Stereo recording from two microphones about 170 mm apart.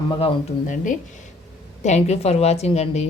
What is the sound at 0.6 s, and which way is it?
A woman's voice, 50° left (ahead or behind).